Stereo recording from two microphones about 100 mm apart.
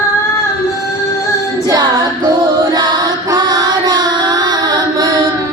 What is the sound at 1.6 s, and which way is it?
Music, 40° right (ahead or behind).